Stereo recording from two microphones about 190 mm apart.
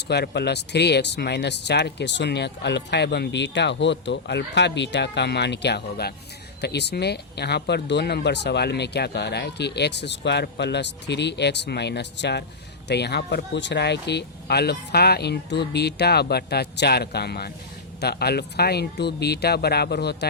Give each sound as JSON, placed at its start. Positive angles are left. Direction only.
{"t": 0.1, "sound": "speech", "side_deg": 60}